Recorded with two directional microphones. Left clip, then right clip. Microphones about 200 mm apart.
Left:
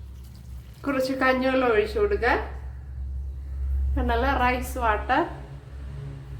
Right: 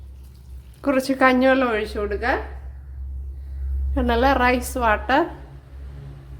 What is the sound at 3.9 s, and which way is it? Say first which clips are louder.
A woman's voice: right 6 dB; 50° right (ahead or behind).